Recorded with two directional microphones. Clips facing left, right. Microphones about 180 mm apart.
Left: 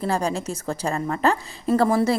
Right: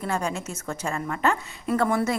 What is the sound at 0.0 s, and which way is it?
A woman's voice, 35° left (ahead or behind).